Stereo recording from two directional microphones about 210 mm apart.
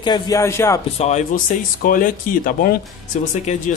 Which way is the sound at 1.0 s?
30° left (ahead or behind).